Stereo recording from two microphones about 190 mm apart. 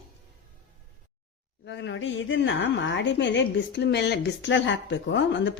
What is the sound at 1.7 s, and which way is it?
A woman's voice, 70° left (ahead or behind).